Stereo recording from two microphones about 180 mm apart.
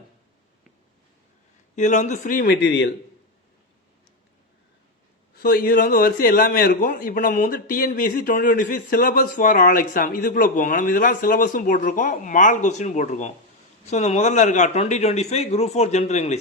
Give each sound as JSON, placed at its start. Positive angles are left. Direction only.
{"t": 1.7, "sound": "a man's voice", "side_deg": 40}
{"t": 2.6, "sound": "a man's voice", "side_deg": 80}
{"t": 5.4, "sound": "a man's voice", "side_deg": 55}